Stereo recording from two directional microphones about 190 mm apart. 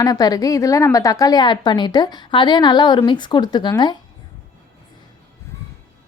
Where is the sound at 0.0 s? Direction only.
20° left (ahead or behind).